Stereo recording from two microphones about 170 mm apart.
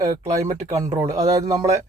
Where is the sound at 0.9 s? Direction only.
20° right (ahead or behind).